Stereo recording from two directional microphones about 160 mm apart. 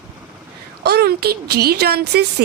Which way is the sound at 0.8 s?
85° right.